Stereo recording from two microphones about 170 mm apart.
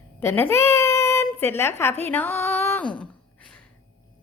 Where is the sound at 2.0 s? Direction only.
10° left (ahead or behind).